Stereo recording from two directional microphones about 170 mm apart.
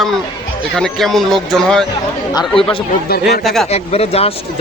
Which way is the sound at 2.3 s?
25° left (ahead or behind).